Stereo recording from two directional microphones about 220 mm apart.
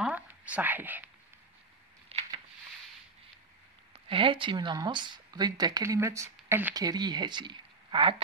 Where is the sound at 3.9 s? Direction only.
25° right (ahead or behind).